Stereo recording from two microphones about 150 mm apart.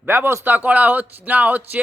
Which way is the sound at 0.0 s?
15° right (ahead or behind).